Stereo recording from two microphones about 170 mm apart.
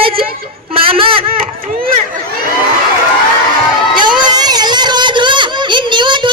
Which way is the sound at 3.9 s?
25° right (ahead or behind).